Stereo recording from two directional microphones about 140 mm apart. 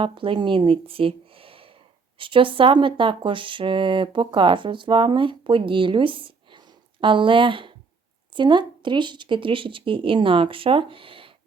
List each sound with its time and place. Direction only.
0.0 s a woman's voice: 40° right (ahead or behind)